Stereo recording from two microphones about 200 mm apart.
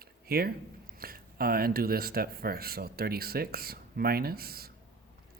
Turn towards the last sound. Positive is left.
turn(degrees=-50)  # may be behind; listen again after turning